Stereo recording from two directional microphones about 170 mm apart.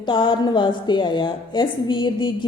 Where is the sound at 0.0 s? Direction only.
30° left (ahead or behind).